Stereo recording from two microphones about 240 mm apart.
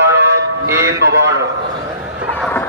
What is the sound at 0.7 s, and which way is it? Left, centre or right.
Music, centre.